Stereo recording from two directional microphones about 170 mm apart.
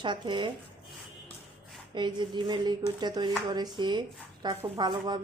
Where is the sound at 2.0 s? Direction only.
25° right (ahead or behind).